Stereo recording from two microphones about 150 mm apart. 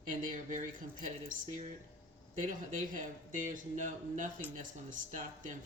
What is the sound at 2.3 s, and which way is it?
Speech, 60° right (ahead or behind).